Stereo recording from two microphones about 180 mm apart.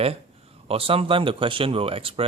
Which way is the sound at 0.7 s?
30° right (ahead or behind).